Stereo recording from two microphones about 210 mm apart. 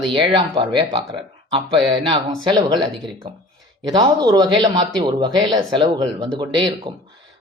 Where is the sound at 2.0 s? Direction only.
25° right (ahead or behind).